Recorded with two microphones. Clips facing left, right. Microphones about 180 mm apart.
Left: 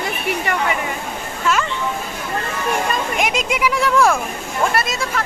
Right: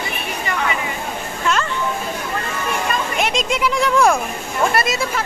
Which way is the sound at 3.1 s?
10° left (ahead or behind).